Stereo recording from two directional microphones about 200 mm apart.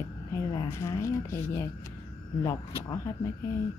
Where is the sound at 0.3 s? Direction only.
20° left (ahead or behind).